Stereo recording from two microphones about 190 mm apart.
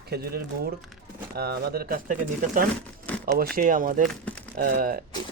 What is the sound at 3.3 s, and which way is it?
Speech, 50° right (ahead or behind).